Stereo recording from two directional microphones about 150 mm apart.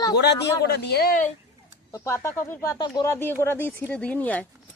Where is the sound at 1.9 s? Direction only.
20° left (ahead or behind).